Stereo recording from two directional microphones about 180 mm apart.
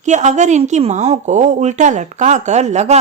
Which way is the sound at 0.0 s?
40° right (ahead or behind).